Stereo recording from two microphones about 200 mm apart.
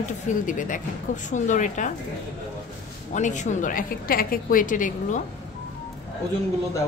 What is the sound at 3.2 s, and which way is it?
A woman's voice, 40° left (ahead or behind).